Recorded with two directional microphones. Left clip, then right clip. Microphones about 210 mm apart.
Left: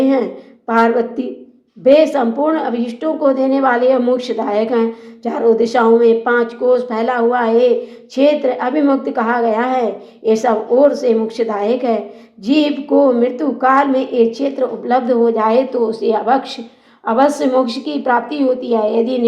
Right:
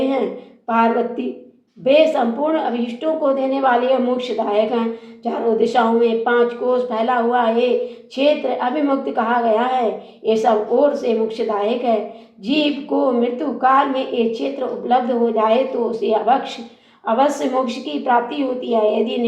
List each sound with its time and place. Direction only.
0.7 s a woman's voice: 40° left (ahead or behind)